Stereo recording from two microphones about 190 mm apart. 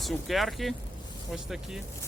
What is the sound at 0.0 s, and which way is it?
Speech, centre (ahead or behind).